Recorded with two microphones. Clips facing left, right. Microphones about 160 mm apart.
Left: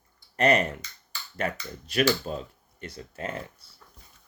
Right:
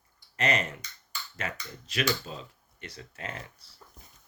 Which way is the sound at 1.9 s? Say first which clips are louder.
Left 6 dB; 50° left (ahead or behind).